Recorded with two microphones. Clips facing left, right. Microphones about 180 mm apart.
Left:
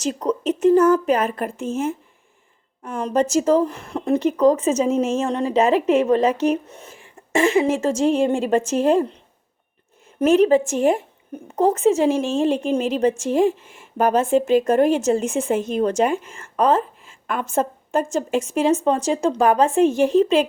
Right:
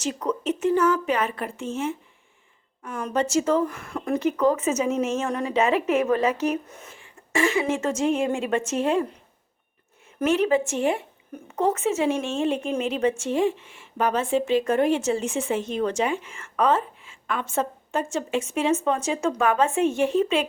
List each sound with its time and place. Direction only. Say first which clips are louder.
0.0 s speech: left 4 dB; 40° left (ahead or behind)
2.8 s speech: left 5 dB; 35° left (ahead or behind)
6.9 s cough: left 5 dB; 45° left (ahead or behind)
7.6 s speech: left 5 dB; 35° left (ahead or behind)
10.7 s speech: left 5 dB; 40° left (ahead or behind)